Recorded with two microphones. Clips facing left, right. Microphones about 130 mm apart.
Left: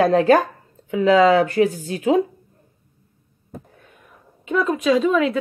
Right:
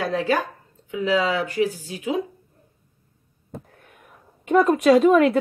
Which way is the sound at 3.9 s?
55° right (ahead or behind).